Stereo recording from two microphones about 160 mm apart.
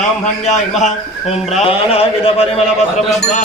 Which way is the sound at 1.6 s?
35° left (ahead or behind).